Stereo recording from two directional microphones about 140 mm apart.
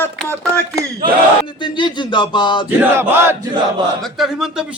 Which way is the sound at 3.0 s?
15° right (ahead or behind).